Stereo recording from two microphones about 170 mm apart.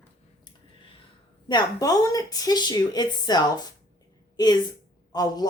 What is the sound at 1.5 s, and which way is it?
Speech, 25° left (ahead or behind).